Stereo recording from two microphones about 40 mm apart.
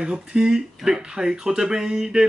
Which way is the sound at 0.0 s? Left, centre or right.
Right.